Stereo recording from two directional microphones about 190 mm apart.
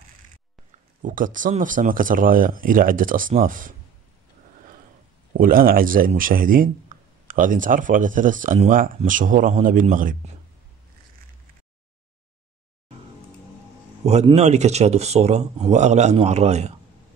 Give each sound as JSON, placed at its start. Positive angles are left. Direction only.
{"t": 1.0, "sound": "speech", "side_deg": -45}
{"t": 5.3, "sound": "speech", "side_deg": -50}
{"t": 14.2, "sound": "speech", "side_deg": -35}